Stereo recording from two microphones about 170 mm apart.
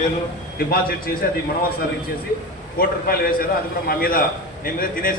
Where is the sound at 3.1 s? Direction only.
60° left (ahead or behind).